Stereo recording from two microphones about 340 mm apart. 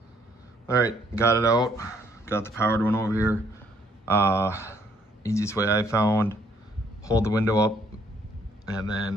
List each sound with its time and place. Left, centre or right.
0.7 s speech: centre
8.9 s speech: right